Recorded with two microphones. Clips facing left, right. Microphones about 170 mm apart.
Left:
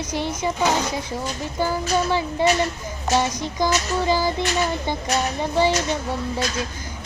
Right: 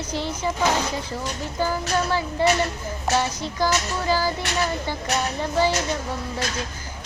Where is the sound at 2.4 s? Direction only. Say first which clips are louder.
Even; 15° left (ahead or behind).